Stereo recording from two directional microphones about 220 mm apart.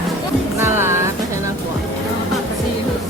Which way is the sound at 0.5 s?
10° right (ahead or behind).